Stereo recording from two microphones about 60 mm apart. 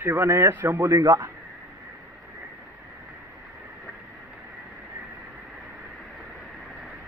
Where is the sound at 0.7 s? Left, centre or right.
Right.